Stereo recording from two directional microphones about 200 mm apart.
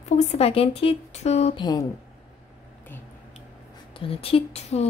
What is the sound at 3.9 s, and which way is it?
Speech, 25° left (ahead or behind).